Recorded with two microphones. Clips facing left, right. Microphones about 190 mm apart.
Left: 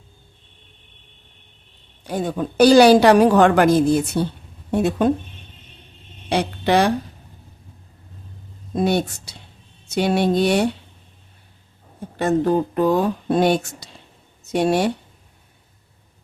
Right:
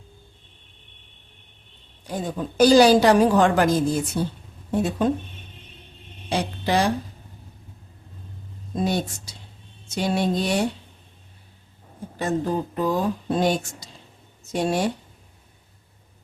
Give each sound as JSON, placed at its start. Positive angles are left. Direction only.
{"t": 2.0, "sound": "a woman's voice", "side_deg": 65}
{"t": 6.2, "sound": "speech", "side_deg": 65}
{"t": 8.7, "sound": "a woman's voice", "side_deg": 65}
{"t": 12.1, "sound": "a woman's voice", "side_deg": 65}